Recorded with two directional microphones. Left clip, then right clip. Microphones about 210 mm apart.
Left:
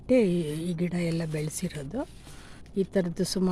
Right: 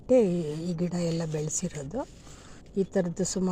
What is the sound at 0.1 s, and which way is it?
Speech, 15° left (ahead or behind).